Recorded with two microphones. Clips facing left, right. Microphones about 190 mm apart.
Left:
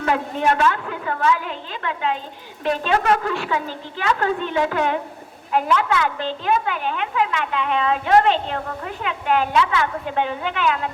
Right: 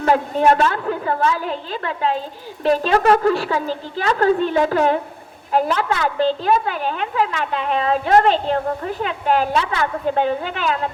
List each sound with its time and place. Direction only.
0.0 s a woman's voice: 35° right (ahead or behind)